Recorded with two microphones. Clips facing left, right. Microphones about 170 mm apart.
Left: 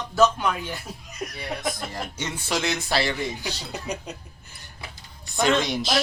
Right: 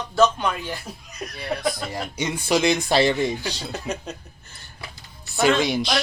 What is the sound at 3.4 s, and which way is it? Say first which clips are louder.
Speech: right 3 dB; 15° left (ahead or behind).